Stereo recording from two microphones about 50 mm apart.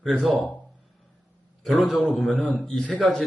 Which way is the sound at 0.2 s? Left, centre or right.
Centre.